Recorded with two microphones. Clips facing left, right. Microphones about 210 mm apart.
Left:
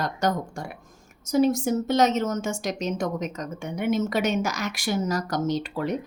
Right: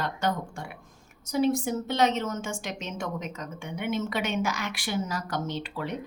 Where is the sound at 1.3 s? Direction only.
40° left (ahead or behind).